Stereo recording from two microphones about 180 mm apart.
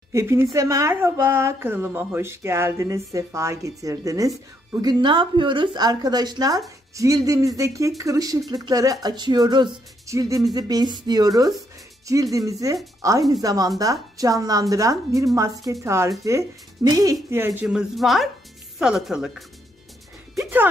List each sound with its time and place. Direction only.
0.1 s a woman's voice: 15° right (ahead or behind)
17.5 s a woman's voice: 5° right (ahead or behind)
20.3 s music: 10° right (ahead or behind)